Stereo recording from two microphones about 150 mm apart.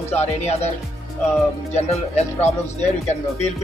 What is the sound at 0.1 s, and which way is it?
Speech, 45° left (ahead or behind).